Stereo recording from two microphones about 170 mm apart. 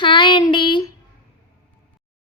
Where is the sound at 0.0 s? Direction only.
30° left (ahead or behind).